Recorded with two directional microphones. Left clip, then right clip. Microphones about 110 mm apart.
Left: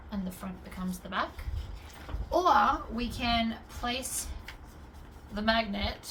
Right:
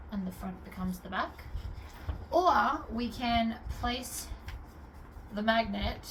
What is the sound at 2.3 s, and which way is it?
A woman's voice, 45° left (ahead or behind).